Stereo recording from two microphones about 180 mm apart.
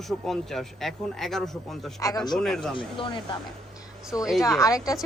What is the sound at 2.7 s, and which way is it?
Speech, 25° left (ahead or behind).